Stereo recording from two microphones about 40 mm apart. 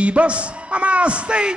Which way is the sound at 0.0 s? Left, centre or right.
Right.